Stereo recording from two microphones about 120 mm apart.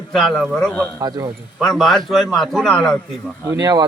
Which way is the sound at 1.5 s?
5° left (ahead or behind).